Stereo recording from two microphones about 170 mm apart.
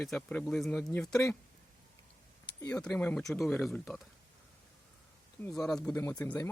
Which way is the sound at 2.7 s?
10° left (ahead or behind).